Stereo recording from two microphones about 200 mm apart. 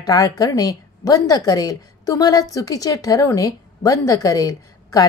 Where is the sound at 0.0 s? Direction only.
20° left (ahead or behind).